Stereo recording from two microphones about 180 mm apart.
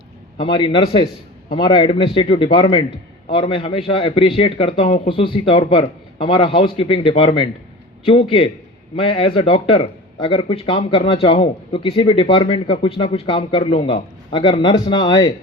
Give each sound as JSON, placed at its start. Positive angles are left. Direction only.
{"t": 0.3, "sound": "a man's voice", "side_deg": 25}